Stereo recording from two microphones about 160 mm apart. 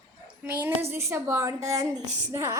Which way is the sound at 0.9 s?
15° right (ahead or behind).